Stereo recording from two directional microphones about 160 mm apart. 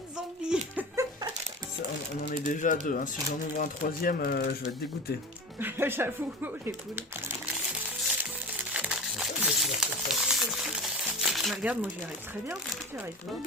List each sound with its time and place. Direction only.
0.5 s speech: 5° right (ahead or behind)
1.0 s a sound: 20° right (ahead or behind)
2.3 s speech: 50° left (ahead or behind); by 4.7 s 70° left (ahead or behind)
5.5 s speech: 15° right (ahead or behind)
8.7 s crumpling: 5° right (ahead or behind)